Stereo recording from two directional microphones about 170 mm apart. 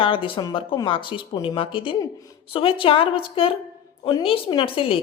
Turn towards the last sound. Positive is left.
turn(degrees=30)  # may be behind; listen again after turning